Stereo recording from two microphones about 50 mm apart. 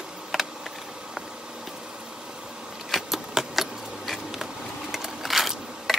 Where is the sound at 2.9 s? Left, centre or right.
Centre.